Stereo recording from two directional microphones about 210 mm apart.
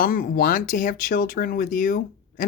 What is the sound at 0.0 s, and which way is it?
Speech, 40° left (ahead or behind).